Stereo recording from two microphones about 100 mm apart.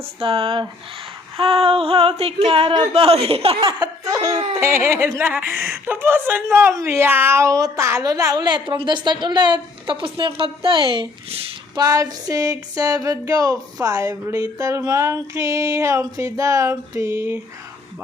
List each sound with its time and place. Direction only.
0.2 s speech: 65° right (ahead or behind)
4.0 s laughter: 35° right (ahead or behind)
4.6 s speech: 25° right (ahead or behind)
7.4 s a sound: 35° right (ahead or behind)
8.8 s a woman's voice: 50° right (ahead or behind)
11.7 s a sound: 40° right (ahead or behind)